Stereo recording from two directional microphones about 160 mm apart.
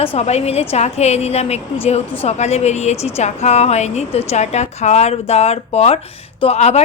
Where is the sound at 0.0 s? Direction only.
35° left (ahead or behind).